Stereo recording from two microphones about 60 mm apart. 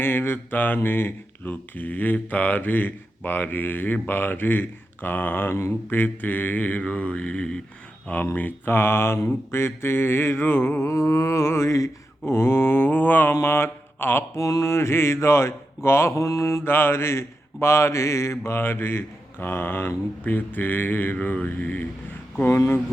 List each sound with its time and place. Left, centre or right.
0.0 s speech: left; by 7.6 s centre
8.4 s speech: left
8.7 s mantra: left
10.8 s mantra: left
12.2 s speech: left
14.3 s mantra: left
16.6 s mantra: left
20.2 s speech: left
22.4 s mantra: left